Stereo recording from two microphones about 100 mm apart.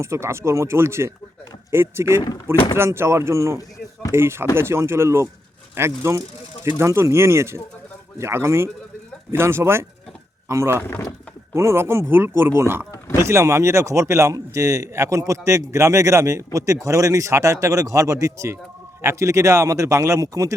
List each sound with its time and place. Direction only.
0.0 s a man's voice: 25° right (ahead or behind)